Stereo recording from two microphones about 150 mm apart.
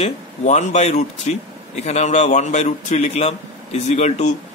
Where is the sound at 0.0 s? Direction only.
50° left (ahead or behind).